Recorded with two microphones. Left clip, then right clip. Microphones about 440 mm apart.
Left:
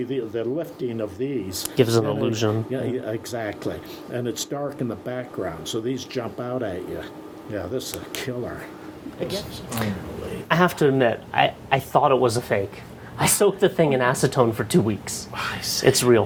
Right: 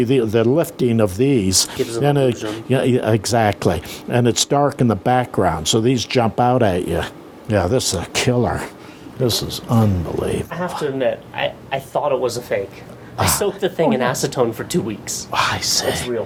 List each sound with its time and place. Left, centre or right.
0.0 s speech: right
1.8 s speech: left
2.6 s speech: right
10.6 s speech: left
13.1 s speech: left
15.3 s speech: right